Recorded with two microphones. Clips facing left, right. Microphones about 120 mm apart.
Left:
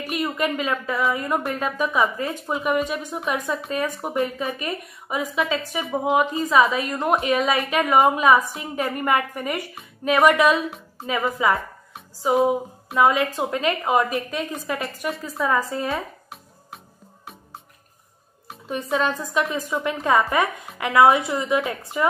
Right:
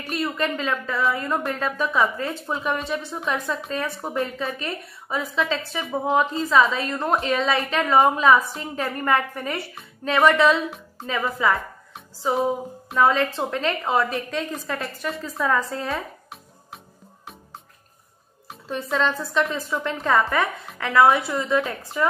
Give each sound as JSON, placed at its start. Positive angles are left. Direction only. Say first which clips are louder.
{"t": 0.0, "sound": "a woman's voice", "louder": "left 1 dB", "side_deg": 10}
{"t": 15.3, "sound": "music", "louder": "even", "side_deg": 0}
{"t": 18.7, "sound": "a woman's voice", "louder": "left 1 dB", "side_deg": 10}